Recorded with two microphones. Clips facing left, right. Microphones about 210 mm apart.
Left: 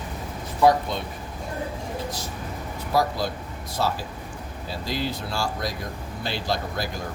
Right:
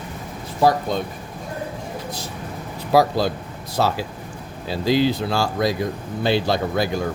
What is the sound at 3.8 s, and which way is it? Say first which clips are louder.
Speech: right 5 dB; 90° right.